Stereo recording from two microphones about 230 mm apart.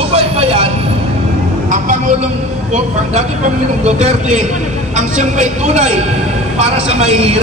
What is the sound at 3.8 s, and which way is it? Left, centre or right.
A man's voice, right.